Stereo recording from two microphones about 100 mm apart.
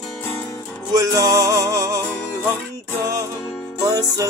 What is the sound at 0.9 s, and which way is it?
Music, 35° right (ahead or behind).